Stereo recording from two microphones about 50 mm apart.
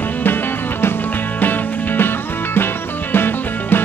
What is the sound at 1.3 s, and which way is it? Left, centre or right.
Music, left.